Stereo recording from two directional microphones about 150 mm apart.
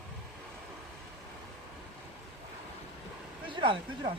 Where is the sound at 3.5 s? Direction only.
35° right (ahead or behind).